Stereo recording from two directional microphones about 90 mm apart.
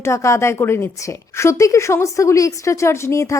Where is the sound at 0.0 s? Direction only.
35° left (ahead or behind).